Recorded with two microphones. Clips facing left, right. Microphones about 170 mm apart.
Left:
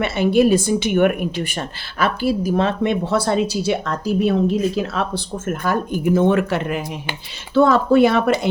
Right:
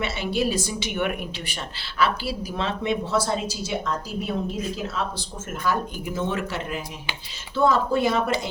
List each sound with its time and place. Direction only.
0.0 s a woman's voice: 55° left (ahead or behind); by 8.2 s 70° left (ahead or behind)